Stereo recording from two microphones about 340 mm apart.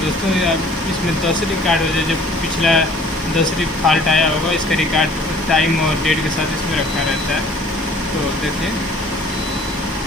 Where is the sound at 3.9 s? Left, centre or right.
Centre.